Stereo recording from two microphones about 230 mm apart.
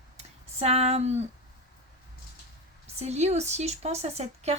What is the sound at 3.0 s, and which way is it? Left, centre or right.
Speech, right.